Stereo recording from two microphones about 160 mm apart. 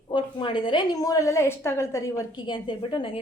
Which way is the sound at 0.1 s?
30° left (ahead or behind).